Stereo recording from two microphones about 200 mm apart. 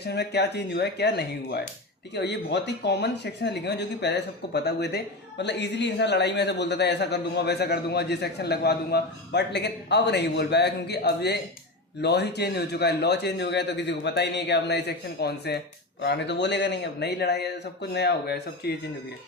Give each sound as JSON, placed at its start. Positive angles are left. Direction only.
{"t": 0.0, "sound": "speech", "side_deg": 55}